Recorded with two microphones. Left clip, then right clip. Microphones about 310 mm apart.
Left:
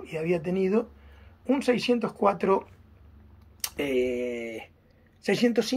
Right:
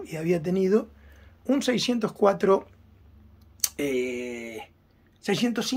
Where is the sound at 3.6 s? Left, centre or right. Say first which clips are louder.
Right 2 dB; centre.